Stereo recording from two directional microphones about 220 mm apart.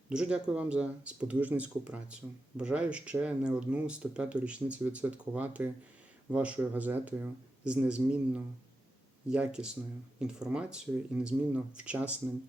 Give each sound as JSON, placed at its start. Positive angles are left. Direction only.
{"t": 0.1, "sound": "speech", "side_deg": -5}